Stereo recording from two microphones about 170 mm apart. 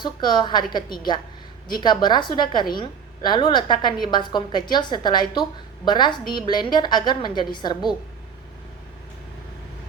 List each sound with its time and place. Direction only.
0.0 s a woman's voice: 25° left (ahead or behind)